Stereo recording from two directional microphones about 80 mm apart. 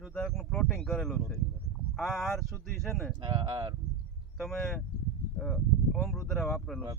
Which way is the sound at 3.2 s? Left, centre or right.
Right.